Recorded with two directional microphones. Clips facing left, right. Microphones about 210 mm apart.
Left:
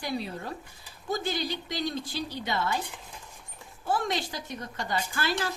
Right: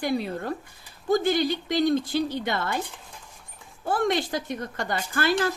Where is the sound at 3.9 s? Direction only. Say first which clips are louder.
Right 5 dB; 55° right (ahead or behind).